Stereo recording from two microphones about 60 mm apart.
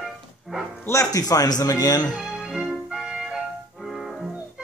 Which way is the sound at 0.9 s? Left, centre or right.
Left.